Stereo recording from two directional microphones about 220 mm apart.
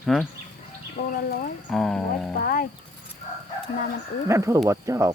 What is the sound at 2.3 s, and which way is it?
Speech, 40° left (ahead or behind).